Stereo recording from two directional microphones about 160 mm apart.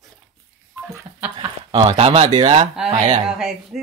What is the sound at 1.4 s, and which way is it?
Speech, 30° right (ahead or behind).